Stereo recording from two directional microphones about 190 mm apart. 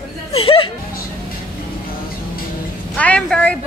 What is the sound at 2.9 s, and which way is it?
Speech, 5° left (ahead or behind).